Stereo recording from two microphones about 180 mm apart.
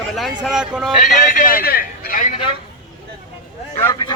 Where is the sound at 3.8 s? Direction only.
15° left (ahead or behind).